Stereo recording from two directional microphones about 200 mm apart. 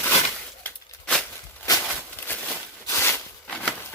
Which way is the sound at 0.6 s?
5° left (ahead or behind).